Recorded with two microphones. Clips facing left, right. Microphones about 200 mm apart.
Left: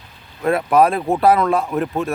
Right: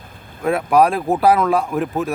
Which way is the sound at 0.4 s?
Centre (ahead or behind).